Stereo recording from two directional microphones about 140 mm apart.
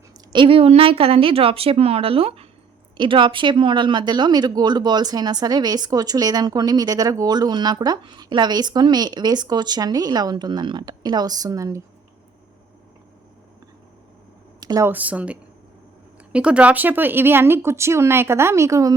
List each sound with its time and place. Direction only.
0.3 s a woman's voice: 40° right (ahead or behind); by 11.8 s 25° right (ahead or behind)
14.6 s a sound: 25° right (ahead or behind)
14.8 s speech: 10° right (ahead or behind)